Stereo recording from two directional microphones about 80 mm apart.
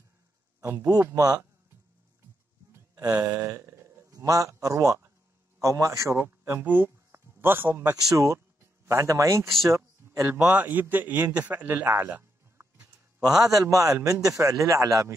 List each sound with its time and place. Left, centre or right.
1.1 s a man's voice: right
3.1 s a man's voice: right
3.3 s a sound: right
4.1 s a man's voice: right
6.6 s a sound: right
8.1 s a man's voice: right
9.7 s a sound: right
10.4 s a man's voice: centre
13.4 s a man's voice: right